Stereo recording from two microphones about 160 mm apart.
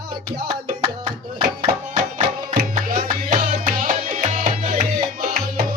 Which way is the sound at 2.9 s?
55° right (ahead or behind).